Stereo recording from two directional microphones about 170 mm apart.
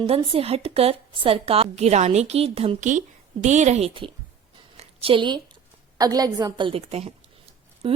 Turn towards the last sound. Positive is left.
turn(degrees=-35)  # may be behind; listen again after turning